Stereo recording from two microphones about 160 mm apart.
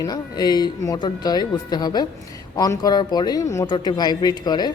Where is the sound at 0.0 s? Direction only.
25° left (ahead or behind).